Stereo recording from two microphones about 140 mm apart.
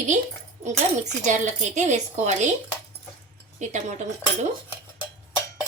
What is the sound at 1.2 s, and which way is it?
A woman's voice, 60° right (ahead or behind).